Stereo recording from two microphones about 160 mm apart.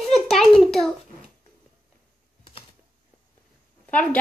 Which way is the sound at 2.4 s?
35° left (ahead or behind).